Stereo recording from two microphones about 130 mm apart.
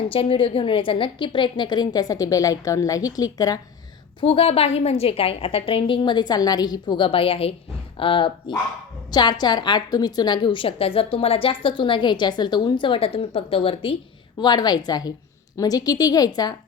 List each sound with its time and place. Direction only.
0.1 s a woman's voice: 45° left (ahead or behind); by 3.6 s 30° left (ahead or behind)
4.2 s a woman's voice: 50° left (ahead or behind); by 16.6 s 30° left (ahead or behind)